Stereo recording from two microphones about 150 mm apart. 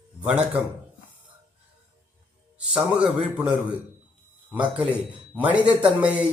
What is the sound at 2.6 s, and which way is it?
A man's voice, 5° right (ahead or behind).